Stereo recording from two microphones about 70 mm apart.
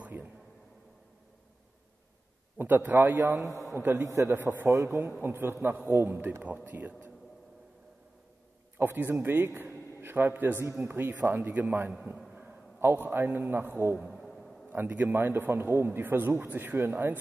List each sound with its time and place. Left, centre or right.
0.0 s a sound: right
2.6 s a man's voice: right
4.0 s a man's voice: right
5.2 s a man's voice: right
8.7 s a man's voice: right
14.0 s a sound: centre
14.7 s a man's voice: right